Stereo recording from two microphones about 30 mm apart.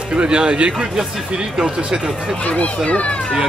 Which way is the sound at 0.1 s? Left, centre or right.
Right.